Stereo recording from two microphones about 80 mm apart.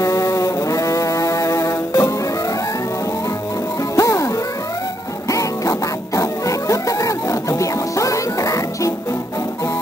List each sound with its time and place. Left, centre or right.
0.0 s music: left
3.9 s music: left
5.3 s music: left